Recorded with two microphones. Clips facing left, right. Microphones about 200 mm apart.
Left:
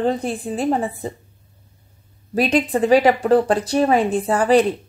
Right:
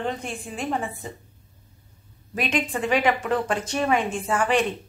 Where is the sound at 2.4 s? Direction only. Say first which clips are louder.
Left 8 dB; 35° left (ahead or behind).